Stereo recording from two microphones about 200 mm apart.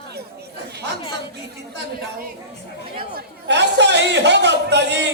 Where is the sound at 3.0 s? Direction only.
55° right (ahead or behind).